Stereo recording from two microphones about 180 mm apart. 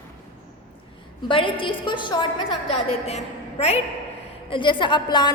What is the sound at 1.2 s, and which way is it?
A woman's voice, 30° left (ahead or behind).